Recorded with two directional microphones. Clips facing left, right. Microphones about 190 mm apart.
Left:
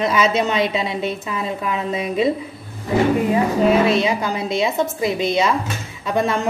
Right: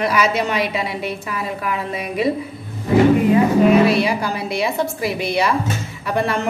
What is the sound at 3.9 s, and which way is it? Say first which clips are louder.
A woman's voice: even; 20° left (ahead or behind).